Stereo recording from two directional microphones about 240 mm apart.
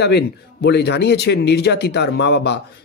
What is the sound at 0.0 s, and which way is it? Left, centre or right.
Speech, left.